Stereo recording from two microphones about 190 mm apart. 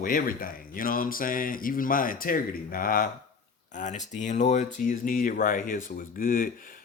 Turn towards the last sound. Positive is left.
turn(degrees=50)  # may be behind; listen again after turning